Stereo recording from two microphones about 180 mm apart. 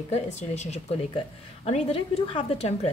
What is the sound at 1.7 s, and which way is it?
Speech, 30° left (ahead or behind).